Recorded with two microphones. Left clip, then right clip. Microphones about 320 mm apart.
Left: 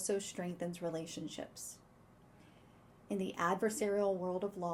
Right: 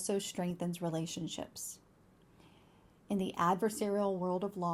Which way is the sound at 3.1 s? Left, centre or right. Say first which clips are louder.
Right 3 dB; right.